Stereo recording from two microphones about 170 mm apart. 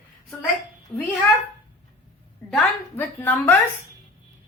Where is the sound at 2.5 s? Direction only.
10° left (ahead or behind).